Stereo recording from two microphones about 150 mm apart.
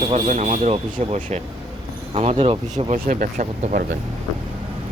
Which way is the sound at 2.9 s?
60° right (ahead or behind).